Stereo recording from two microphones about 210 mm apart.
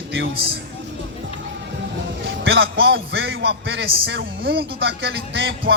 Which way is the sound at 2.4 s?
65° right (ahead or behind).